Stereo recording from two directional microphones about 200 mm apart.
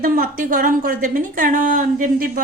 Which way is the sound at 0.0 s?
45° right (ahead or behind).